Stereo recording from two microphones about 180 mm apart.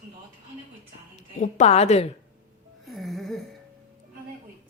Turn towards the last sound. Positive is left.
turn(degrees=0)  # may be behind; listen again after turning